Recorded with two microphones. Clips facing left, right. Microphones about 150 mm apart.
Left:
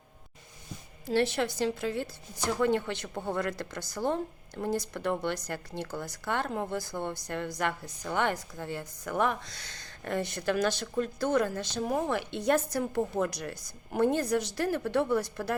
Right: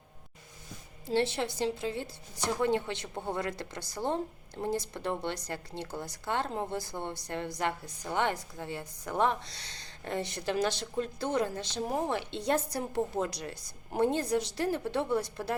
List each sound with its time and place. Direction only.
1.0 s a woman's voice: 20° right (ahead or behind)